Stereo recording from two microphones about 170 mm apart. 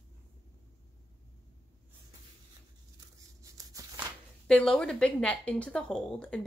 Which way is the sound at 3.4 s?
20° right (ahead or behind).